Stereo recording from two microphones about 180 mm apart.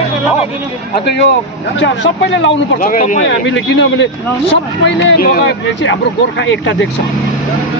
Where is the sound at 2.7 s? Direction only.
45° left (ahead or behind).